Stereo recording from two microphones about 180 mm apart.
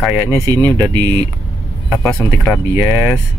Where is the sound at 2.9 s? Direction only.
15° right (ahead or behind).